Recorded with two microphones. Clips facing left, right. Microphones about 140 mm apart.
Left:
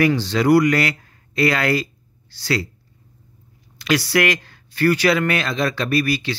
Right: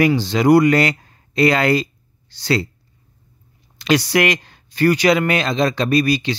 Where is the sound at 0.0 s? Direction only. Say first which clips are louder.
Right 2 dB; 15° right (ahead or behind).